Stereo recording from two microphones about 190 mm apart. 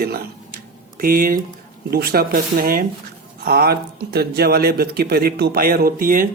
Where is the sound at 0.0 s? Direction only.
55° right (ahead or behind).